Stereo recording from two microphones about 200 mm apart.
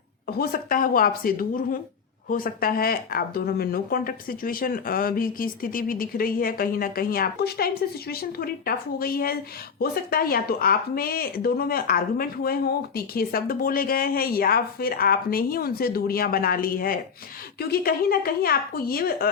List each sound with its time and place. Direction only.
0.3 s speech: 50° left (ahead or behind)